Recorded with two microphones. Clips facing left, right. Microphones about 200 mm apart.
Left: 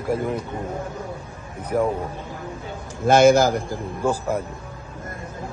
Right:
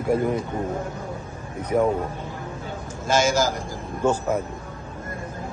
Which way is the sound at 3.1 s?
60° left (ahead or behind).